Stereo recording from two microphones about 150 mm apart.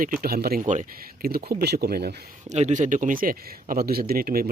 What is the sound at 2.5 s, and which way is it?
Speech, 50° right (ahead or behind).